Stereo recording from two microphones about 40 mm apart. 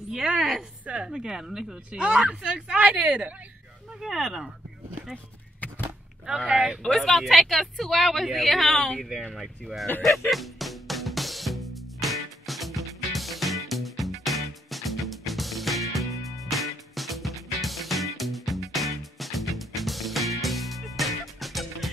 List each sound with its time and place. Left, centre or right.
0.1 s a woman's voice: right
0.4 s a woman's voice: centre
1.9 s a woman's voice: right
2.1 s a woman's voice: right
4.0 s speech: centre
6.2 s speech: centre
6.5 s a woman's voice: right
7.1 s speech: centre
10.3 s music: centre